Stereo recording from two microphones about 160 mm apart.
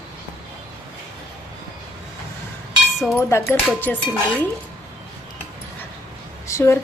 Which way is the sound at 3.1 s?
15° left (ahead or behind).